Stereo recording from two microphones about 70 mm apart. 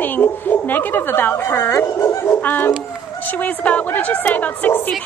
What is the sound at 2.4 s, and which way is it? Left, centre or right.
A woman's voice, left.